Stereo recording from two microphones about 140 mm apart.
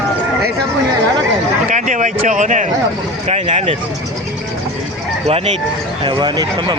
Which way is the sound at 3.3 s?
50° right (ahead or behind).